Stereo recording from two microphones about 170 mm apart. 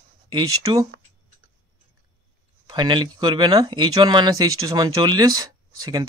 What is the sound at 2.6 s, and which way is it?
Speech, 25° right (ahead or behind).